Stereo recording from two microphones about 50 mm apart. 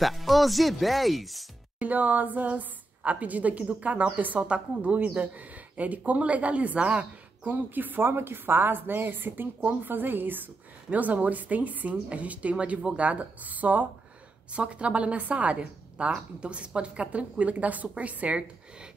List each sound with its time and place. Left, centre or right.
0.0 s speech: centre
1.8 s a woman's voice: right